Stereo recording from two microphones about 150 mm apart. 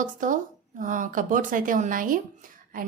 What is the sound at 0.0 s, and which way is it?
Speech, 60° right (ahead or behind).